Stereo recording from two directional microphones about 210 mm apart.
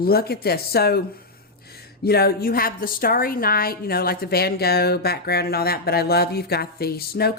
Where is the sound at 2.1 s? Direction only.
50° left (ahead or behind).